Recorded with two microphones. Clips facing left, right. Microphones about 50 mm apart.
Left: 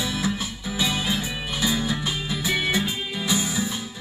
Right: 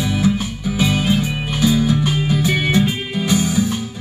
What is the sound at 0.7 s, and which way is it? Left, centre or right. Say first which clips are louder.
Music: right 7 dB; right.